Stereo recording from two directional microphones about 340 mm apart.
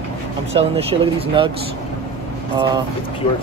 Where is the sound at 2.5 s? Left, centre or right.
Centre.